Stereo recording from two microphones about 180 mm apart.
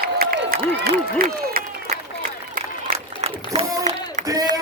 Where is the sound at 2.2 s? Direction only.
50° right (ahead or behind).